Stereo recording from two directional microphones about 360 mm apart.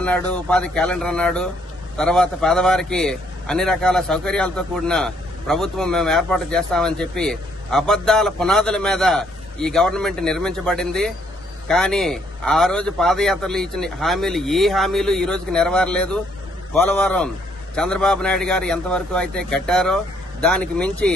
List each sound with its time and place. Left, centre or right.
0.3 s a man's voice: centre